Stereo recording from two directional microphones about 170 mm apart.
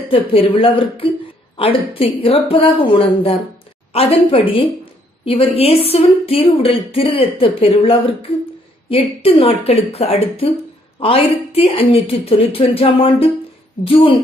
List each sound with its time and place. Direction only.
0.1 s a woman's voice: 35° left (ahead or behind)